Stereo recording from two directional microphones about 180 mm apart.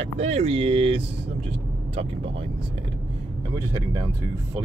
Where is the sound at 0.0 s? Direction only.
35° right (ahead or behind).